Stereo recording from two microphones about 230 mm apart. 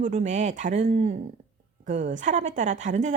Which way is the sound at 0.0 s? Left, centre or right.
Right.